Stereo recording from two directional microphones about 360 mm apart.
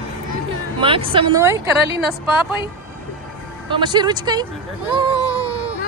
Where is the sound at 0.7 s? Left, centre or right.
Centre.